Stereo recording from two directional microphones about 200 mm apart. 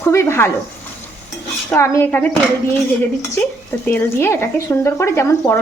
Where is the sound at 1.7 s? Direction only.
15° left (ahead or behind).